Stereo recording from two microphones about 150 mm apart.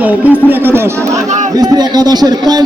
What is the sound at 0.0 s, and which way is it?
A man's voice, 10° right (ahead or behind).